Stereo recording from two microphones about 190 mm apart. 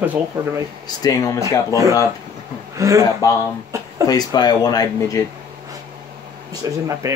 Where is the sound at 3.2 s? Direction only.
15° left (ahead or behind).